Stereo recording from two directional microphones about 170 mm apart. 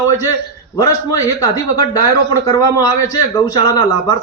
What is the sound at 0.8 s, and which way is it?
A man's voice, 20° left (ahead or behind).